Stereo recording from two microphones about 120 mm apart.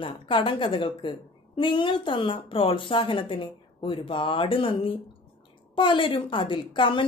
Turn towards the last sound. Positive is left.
turn(degrees=45)  # may be behind; listen again after turning